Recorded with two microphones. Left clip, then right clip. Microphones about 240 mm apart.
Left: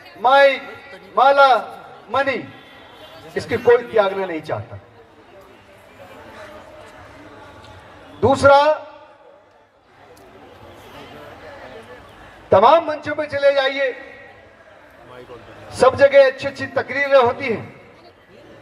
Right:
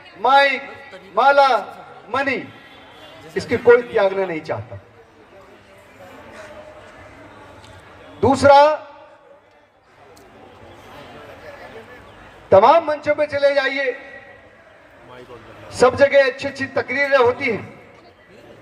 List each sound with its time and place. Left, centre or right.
0.2 s a man's voice: right
8.2 s a man's voice: right
12.5 s a man's voice: right
15.7 s a man's voice: right